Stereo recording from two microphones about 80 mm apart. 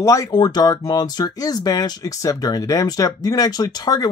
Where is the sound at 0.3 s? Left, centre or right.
Left.